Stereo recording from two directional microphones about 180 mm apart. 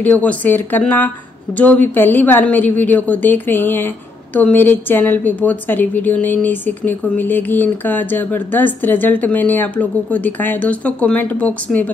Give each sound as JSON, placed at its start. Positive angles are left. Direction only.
{"t": 0.0, "sound": "a woman's voice", "side_deg": 10}